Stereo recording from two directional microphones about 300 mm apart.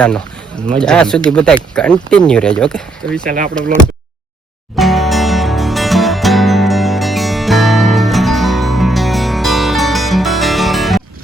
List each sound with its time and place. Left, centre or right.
0.8 s speech: centre
3.2 s speech: right
4.8 s music: centre